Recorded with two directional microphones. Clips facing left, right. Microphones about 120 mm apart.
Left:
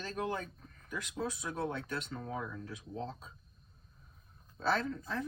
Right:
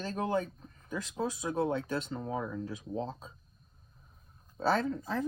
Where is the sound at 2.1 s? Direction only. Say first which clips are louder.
Right 5 dB; 25° right (ahead or behind).